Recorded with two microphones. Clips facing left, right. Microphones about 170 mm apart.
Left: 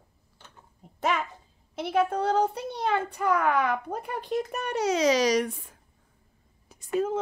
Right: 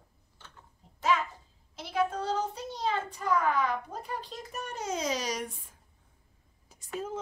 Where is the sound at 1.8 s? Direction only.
60° left (ahead or behind); by 5.8 s 85° left.